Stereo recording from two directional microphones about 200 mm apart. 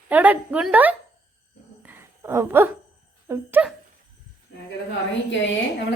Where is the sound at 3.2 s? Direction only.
10° right (ahead or behind).